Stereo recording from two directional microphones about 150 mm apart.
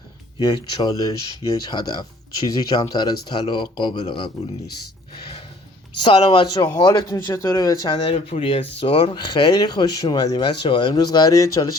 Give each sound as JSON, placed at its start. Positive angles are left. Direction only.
{"t": 0.3, "sound": "speech", "side_deg": 30}
{"t": 6.0, "sound": "speech", "side_deg": 30}
{"t": 8.1, "sound": "speech", "side_deg": 40}